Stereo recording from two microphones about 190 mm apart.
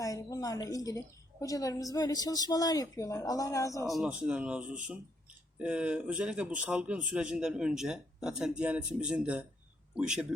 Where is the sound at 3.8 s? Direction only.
Centre (ahead or behind).